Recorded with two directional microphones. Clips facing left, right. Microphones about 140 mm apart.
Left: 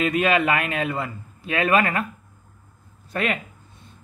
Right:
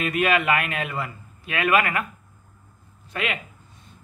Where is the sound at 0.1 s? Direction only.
25° left (ahead or behind).